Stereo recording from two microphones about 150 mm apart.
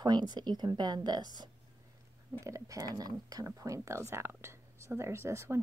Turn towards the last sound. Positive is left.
turn(degrees=-15)  # may be behind; listen again after turning